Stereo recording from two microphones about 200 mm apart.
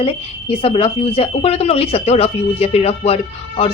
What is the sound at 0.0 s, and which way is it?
A woman's voice, 30° left (ahead or behind).